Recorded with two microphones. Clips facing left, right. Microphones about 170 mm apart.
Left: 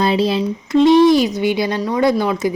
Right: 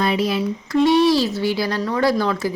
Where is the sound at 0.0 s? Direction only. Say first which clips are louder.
Left 4 dB; 30° left (ahead or behind).